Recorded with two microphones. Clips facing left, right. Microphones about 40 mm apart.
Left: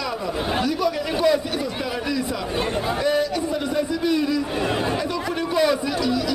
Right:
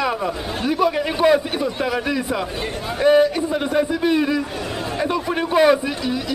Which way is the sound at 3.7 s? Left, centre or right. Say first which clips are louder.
Right 4 dB; right.